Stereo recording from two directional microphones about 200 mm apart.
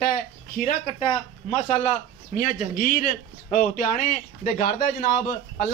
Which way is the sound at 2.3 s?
45° left (ahead or behind).